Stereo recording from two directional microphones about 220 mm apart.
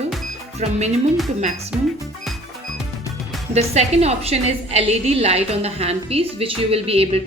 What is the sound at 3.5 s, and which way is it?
A woman's voice, 30° right (ahead or behind).